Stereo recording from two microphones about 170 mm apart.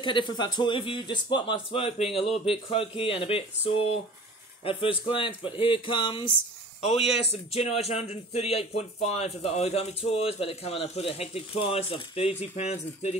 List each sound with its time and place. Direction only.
0.0 s speech: 25° left (ahead or behind)